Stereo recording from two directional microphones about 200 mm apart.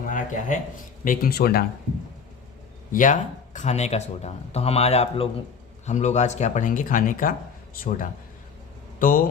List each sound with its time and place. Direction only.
0.1 s a sound: 40° left (ahead or behind)
1.0 s speech: 45° left (ahead or behind)
2.9 s speech: 40° left (ahead or behind)
9.0 s speech: 45° left (ahead or behind)